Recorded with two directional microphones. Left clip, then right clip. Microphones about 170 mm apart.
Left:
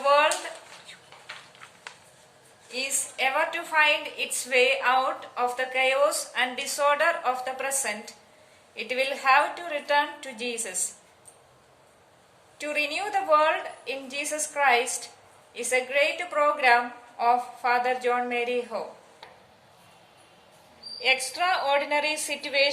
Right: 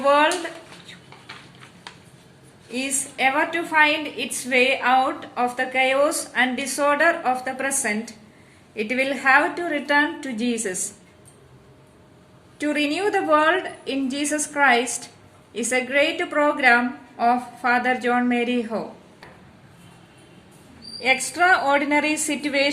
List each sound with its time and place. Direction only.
0.0 s a sound: 25° right (ahead or behind)
2.7 s a woman's voice: 20° right (ahead or behind); by 10.8 s 40° right (ahead or behind)
12.5 s a woman's voice: 40° right (ahead or behind)
21.1 s a woman's voice: 45° right (ahead or behind)